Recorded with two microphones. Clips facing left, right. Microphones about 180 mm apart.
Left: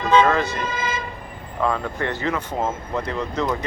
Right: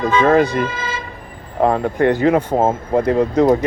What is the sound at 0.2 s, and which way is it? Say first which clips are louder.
Speech: right 8 dB; 50° right (ahead or behind).